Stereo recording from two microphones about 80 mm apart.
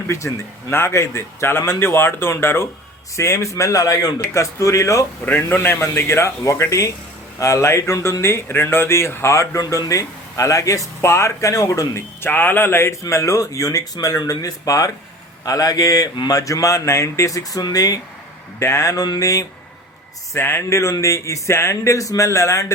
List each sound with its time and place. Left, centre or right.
0.1 s speech: left
12.2 s speech: left
18.6 s speech: left
19.0 s speech: left
20.3 s speech: left